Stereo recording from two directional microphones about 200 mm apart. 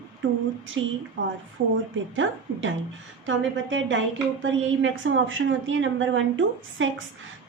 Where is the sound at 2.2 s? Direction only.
80° right.